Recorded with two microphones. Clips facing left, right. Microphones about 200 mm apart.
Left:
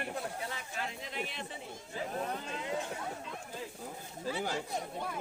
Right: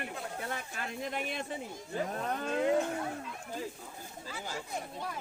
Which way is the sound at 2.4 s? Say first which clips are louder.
Right 9 dB; 55° right (ahead or behind).